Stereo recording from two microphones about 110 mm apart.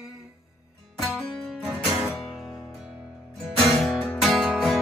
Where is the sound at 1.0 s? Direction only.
Centre (ahead or behind).